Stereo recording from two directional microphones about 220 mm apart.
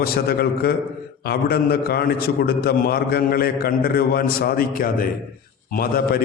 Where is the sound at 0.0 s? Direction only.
45° left (ahead or behind).